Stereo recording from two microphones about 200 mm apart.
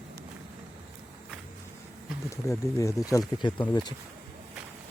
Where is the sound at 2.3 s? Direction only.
15° left (ahead or behind).